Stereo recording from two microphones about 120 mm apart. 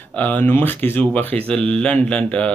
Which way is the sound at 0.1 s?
15° left (ahead or behind).